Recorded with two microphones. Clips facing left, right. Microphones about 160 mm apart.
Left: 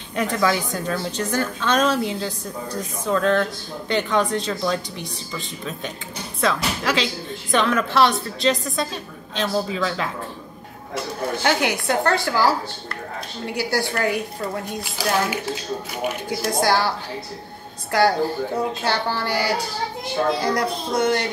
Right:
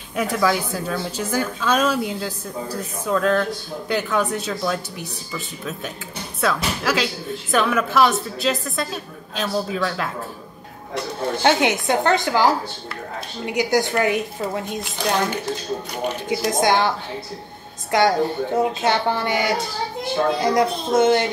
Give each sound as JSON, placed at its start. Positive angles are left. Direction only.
{"t": 0.1, "sound": "a woman's voice", "side_deg": -5}
{"t": 6.4, "sound": "a woman's voice", "side_deg": -5}
{"t": 11.4, "sound": "speech", "side_deg": -20}
{"t": 14.8, "sound": "a woman's voice", "side_deg": 5}
{"t": 16.5, "sound": "speech", "side_deg": -20}
{"t": 17.9, "sound": "speech", "side_deg": -20}